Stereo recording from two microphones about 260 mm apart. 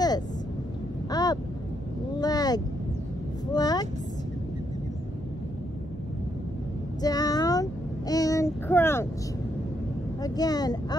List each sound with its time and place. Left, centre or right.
1.1 s a sound: centre
2.1 s vehicle: centre
7.0 s child singing: centre
10.2 s vehicle: centre